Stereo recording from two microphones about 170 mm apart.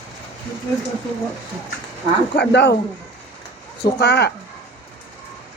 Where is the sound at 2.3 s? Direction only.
85° left.